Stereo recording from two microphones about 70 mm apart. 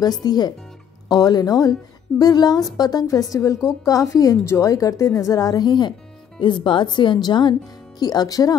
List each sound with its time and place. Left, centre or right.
0.0 s a woman's voice: left
8.0 s a woman's voice: left